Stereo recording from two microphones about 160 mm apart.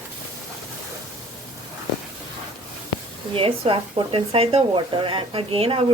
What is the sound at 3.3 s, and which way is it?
A woman's voice, 35° right (ahead or behind).